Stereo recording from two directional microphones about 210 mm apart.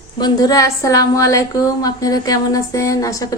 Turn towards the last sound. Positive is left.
turn(degrees=15)  # may be behind; listen again after turning